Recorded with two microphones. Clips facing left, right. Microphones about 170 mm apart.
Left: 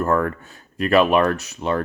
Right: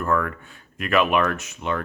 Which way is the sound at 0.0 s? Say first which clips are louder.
Left 4 dB; 40° left (ahead or behind).